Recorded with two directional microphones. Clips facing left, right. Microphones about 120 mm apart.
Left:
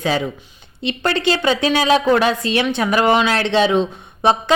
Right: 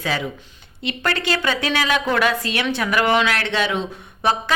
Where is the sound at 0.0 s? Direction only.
25° left (ahead or behind).